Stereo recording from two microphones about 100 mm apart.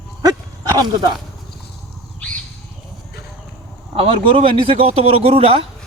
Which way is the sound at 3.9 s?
70° right (ahead or behind).